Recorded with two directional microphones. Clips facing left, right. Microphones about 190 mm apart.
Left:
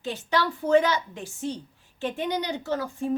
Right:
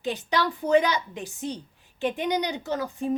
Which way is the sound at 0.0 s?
15° right (ahead or behind).